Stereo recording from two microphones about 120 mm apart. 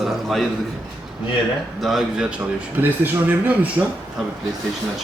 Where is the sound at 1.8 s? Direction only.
Centre (ahead or behind).